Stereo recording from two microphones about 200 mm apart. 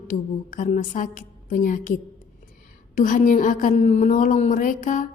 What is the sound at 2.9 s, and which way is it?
A woman's voice, 40° left (ahead or behind).